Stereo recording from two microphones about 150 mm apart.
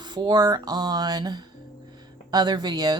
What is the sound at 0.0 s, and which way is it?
Speech, 30° right (ahead or behind).